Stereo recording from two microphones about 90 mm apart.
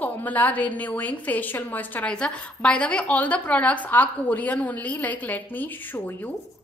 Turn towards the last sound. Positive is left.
turn(degrees=20)  # may be behind; listen again after turning